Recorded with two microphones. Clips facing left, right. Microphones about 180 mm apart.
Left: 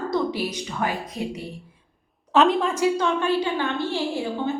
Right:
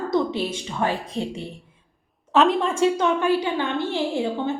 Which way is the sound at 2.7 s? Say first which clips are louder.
Right 2 dB; 20° right (ahead or behind).